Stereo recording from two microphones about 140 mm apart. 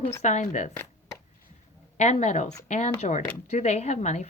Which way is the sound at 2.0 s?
55° left (ahead or behind).